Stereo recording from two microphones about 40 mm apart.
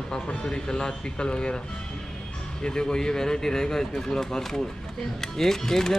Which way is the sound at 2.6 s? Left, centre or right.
Left.